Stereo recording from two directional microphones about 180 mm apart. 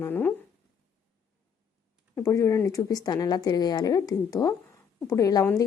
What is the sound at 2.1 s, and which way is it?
Speech, 15° left (ahead or behind).